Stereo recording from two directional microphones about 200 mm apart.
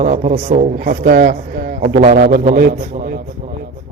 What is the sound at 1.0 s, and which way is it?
A man's voice, 50° right (ahead or behind).